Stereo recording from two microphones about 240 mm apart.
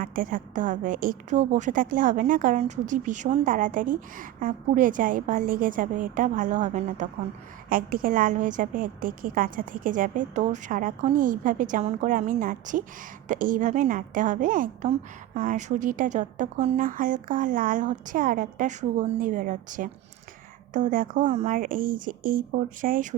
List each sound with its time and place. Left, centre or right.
0.0 s a woman's voice: right